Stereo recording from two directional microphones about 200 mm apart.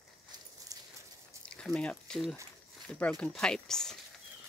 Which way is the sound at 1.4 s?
5° left (ahead or behind).